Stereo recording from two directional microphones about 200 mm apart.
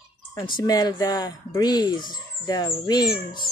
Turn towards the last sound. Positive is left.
turn(degrees=20)  # may be behind; listen again after turning